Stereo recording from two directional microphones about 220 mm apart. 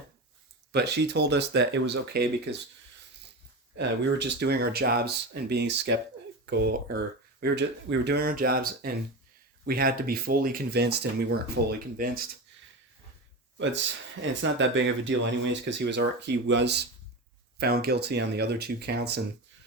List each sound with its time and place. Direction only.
0.7 s speech: 50° right (ahead or behind)
3.8 s speech: 50° right (ahead or behind)
13.6 s speech: 55° right (ahead or behind)